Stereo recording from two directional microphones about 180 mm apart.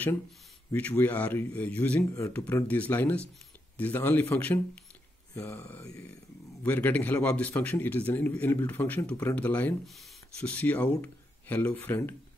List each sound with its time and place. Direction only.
0.7 s speech: 10° left (ahead or behind)